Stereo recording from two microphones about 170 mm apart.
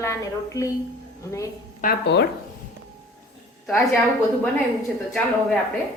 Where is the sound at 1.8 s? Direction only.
75° left (ahead or behind).